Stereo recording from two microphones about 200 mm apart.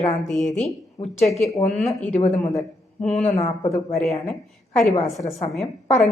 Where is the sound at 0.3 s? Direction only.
Centre (ahead or behind).